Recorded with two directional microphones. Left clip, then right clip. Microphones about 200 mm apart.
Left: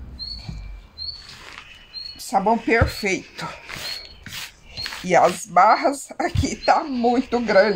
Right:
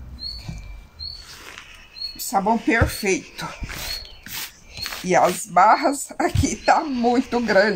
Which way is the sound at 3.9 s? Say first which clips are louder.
Right 1 dB; centre (ahead or behind).